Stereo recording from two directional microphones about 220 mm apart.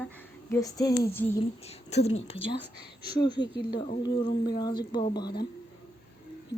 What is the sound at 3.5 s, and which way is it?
Speech, 20° left (ahead or behind).